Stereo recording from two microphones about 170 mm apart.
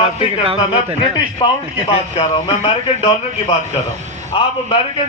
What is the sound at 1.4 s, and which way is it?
A man's voice, 30° left (ahead or behind).